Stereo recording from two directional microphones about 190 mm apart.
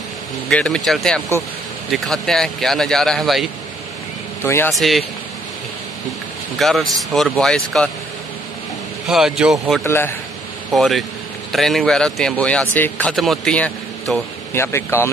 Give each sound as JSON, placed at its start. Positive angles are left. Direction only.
{"t": 0.5, "sound": "speech", "side_deg": 5}
{"t": 4.4, "sound": "a man's voice", "side_deg": 15}
{"t": 4.7, "sound": "speech", "side_deg": 0}
{"t": 6.6, "sound": "speech", "side_deg": 0}
{"t": 9.0, "sound": "speech", "side_deg": 0}
{"t": 9.8, "sound": "a man's voice", "side_deg": 10}
{"t": 10.7, "sound": "speech", "side_deg": 0}